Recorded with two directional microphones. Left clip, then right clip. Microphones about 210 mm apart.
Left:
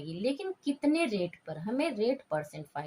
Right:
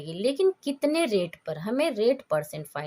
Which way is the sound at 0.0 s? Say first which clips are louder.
Right 9 dB; 55° right (ahead or behind).